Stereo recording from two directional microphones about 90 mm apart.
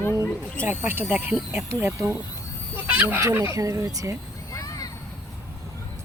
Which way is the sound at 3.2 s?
30° right (ahead or behind).